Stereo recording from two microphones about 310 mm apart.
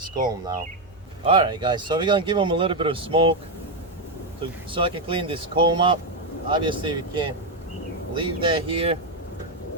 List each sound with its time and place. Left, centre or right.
1.2 s speech: centre
4.7 s speech: centre